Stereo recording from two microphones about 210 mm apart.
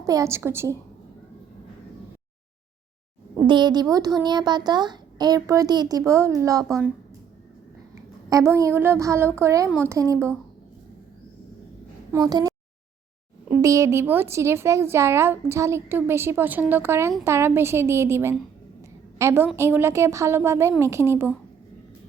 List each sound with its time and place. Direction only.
0.0 s a woman's voice: 15° right (ahead or behind)
3.3 s speech: 20° right (ahead or behind)
8.3 s a woman's voice: 15° right (ahead or behind)
12.1 s speech: 15° right (ahead or behind)
13.6 s a woman's voice: 15° right (ahead or behind)